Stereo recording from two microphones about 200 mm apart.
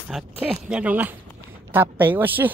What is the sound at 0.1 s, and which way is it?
Speech, 5° right (ahead or behind).